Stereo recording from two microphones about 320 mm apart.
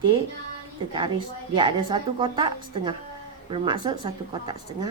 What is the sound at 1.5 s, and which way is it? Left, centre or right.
A woman's voice, centre.